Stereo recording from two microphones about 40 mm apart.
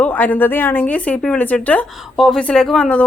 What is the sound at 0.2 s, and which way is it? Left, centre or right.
Speech, left.